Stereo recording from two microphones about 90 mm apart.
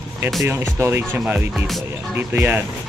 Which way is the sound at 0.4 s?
30° right (ahead or behind).